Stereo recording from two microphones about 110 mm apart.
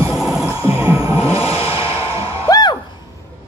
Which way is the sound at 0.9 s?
30° right (ahead or behind).